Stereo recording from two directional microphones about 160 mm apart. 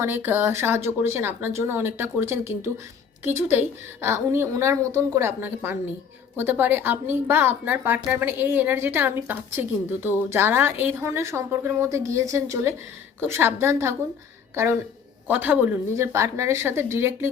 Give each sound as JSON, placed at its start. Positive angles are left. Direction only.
{"t": 0.0, "sound": "a woman's voice", "side_deg": -15}